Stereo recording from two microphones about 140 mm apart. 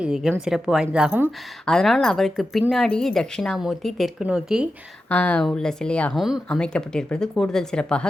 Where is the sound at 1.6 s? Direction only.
5° left (ahead or behind).